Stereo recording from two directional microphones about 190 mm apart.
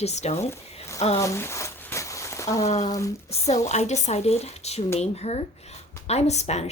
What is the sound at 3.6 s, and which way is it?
Speech, 35° left (ahead or behind).